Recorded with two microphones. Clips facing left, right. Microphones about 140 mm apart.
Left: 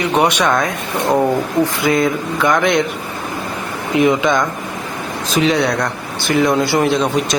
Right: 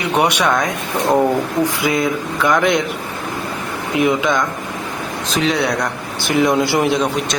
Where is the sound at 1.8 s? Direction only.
5° right (ahead or behind).